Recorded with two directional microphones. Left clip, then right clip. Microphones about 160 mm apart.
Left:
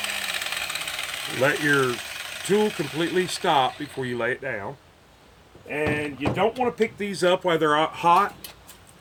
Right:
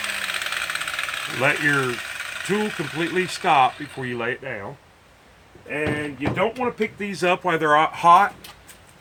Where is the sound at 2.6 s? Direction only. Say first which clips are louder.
Left 6 dB; centre (ahead or behind).